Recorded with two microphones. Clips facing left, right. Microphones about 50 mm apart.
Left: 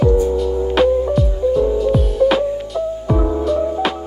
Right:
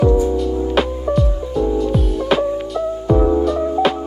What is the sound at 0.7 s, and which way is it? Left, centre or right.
Music, centre.